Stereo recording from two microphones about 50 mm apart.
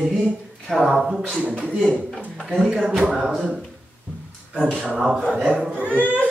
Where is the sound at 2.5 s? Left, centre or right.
Centre.